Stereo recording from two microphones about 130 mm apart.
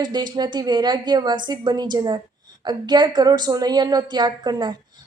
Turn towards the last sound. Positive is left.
turn(degrees=-35)  # may be behind; listen again after turning